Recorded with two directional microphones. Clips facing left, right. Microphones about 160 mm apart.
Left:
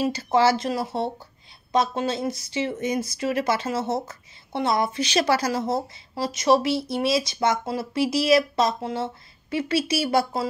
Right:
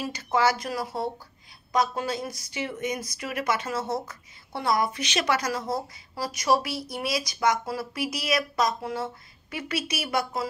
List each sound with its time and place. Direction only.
0.0 s speech: 30° left (ahead or behind)